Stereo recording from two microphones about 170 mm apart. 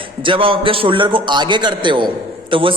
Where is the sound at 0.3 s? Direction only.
30° right (ahead or behind).